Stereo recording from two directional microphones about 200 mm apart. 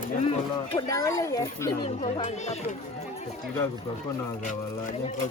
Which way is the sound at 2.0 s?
35° left (ahead or behind).